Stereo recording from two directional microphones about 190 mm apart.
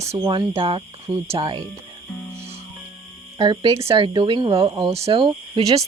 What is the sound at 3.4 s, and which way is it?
Speech, 20° right (ahead or behind).